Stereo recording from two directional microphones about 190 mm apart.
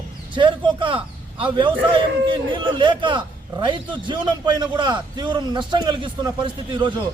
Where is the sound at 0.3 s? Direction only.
25° right (ahead or behind).